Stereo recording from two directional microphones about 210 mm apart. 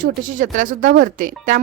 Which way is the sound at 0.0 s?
40° right (ahead or behind).